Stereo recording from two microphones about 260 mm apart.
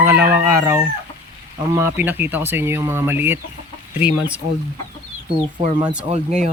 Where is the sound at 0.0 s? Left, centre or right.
Centre.